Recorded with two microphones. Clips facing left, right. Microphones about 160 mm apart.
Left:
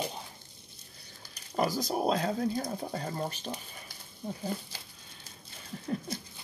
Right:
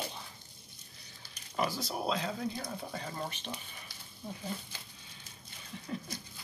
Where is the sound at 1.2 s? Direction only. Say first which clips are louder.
Left 4 dB; 40° left (ahead or behind).